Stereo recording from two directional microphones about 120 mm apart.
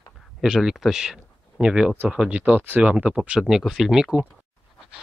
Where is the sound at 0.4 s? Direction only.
5° right (ahead or behind).